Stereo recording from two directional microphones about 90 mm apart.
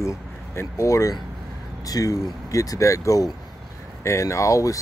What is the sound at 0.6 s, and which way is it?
Speech, 35° left (ahead or behind).